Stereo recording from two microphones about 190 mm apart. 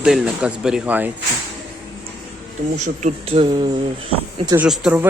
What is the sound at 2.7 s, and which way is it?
Speech, 40° right (ahead or behind).